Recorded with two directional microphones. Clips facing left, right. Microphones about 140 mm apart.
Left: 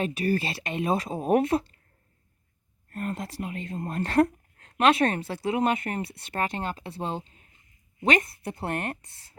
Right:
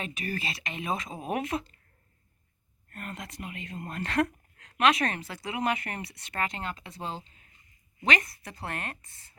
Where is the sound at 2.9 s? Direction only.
35° left (ahead or behind).